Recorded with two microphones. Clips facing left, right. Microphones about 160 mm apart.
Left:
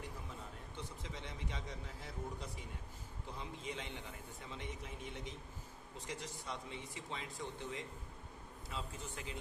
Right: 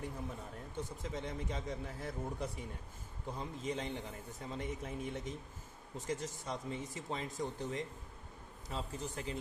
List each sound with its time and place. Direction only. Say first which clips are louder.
0.8 s a man's voice: right 7 dB; 45° right (ahead or behind)